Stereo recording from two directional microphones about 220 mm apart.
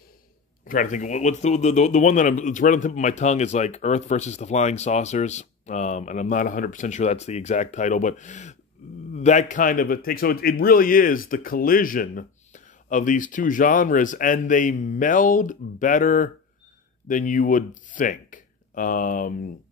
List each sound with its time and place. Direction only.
0.7 s speech: 35° left (ahead or behind)